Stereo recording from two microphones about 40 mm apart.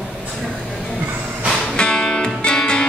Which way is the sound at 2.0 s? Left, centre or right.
Centre.